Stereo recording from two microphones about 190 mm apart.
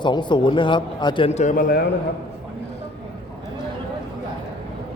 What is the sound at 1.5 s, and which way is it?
Speech, 50° left (ahead or behind).